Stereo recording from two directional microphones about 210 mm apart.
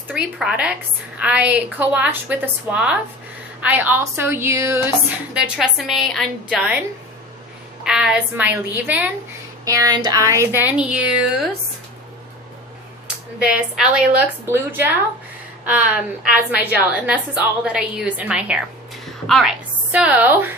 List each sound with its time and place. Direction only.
0.1 s a woman's voice: 5° right (ahead or behind)
7.9 s a woman's voice: 5° right (ahead or behind)
13.4 s a woman's voice: 5° right (ahead or behind)